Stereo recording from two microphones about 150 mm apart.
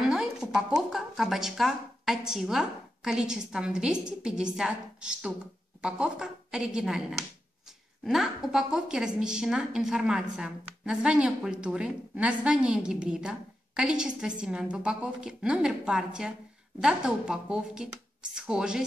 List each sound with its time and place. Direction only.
0.0 s a woman's voice: 5° right (ahead or behind)